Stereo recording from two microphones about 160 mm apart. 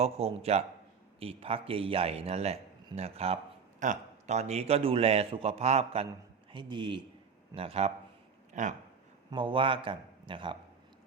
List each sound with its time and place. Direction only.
0.0 s a man's voice: 40° right (ahead or behind)
8.6 s a sound: 50° right (ahead or behind)
9.3 s a man's voice: 30° right (ahead or behind)